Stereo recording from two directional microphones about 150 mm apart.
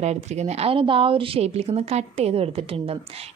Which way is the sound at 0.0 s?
50° right (ahead or behind).